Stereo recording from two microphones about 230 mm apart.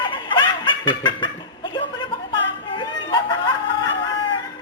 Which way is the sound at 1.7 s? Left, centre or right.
Left.